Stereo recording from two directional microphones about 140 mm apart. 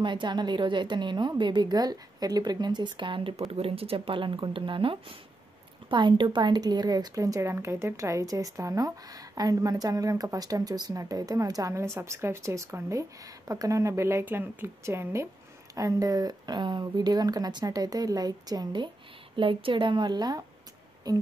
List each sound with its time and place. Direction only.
0.0 s a woman's voice: 35° right (ahead or behind)